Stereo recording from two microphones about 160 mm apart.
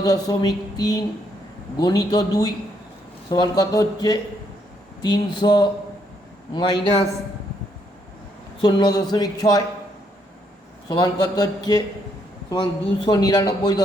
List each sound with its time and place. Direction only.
0.0 s speech: 25° left (ahead or behind)
8.6 s speech: 25° left (ahead or behind)
10.8 s speech: 25° left (ahead or behind)
13.0 s speech: 25° left (ahead or behind)